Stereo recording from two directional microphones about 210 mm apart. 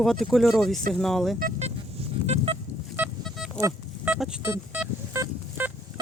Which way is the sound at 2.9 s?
5° right (ahead or behind).